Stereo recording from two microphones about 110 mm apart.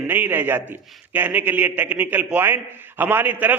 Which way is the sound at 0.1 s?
20° right (ahead or behind).